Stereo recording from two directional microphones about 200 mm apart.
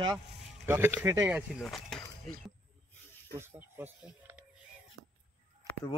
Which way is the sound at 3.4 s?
10° right (ahead or behind).